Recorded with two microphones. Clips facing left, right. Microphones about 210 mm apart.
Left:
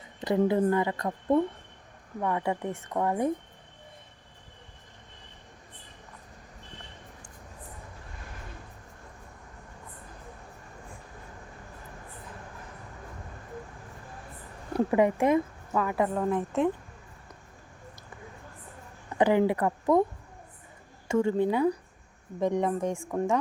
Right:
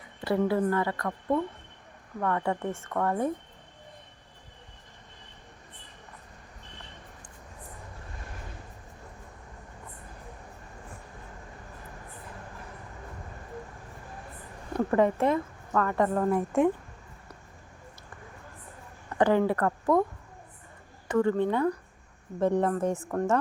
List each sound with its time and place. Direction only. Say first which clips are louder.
0.2 s a woman's voice: left 1 dB; 20° left (ahead or behind)
14.7 s speech: even; 10° left (ahead or behind)
16.3 s speech: right 2 dB; 10° right (ahead or behind)
19.0 s speech: even; 10° left (ahead or behind)
21.1 s speech: right 1 dB; 25° left (ahead or behind)
21.3 s a woman's voice: left 1 dB; 10° left (ahead or behind)
22.4 s speech: right 2 dB; 5° right (ahead or behind)
23.0 s a woman's voice: even; 10° left (ahead or behind)